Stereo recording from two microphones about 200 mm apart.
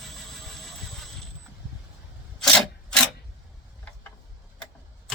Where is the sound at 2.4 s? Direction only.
5° left (ahead or behind).